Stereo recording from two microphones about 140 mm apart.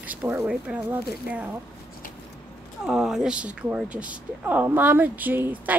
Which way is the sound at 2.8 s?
5° right (ahead or behind).